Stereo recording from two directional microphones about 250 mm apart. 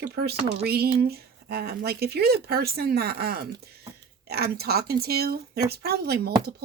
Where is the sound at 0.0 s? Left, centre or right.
Right.